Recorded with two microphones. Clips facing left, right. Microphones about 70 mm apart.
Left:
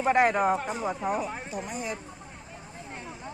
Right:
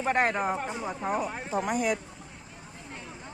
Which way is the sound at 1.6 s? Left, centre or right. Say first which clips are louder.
Right 10 dB; right.